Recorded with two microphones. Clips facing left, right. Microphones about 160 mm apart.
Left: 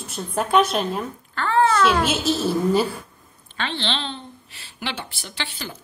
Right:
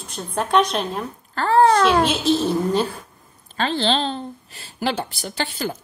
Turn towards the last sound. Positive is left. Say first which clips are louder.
# right 7 dB
turn(degrees=-45)  # may be behind; listen again after turning